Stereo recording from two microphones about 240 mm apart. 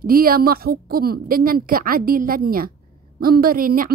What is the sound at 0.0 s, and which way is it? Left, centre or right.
A woman's voice, right.